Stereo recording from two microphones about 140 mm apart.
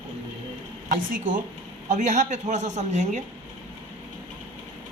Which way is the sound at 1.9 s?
55° right (ahead or behind).